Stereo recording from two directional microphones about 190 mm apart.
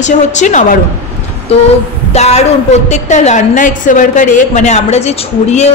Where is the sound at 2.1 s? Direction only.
35° left (ahead or behind).